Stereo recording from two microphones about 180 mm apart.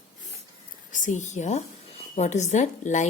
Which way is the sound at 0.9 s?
45° left (ahead or behind).